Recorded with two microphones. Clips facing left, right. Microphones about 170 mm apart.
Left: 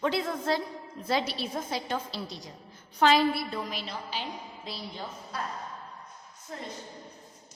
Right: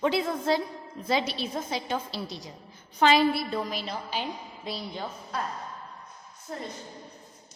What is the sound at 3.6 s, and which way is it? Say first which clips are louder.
Speech: right 3 dB; 45° right (ahead or behind).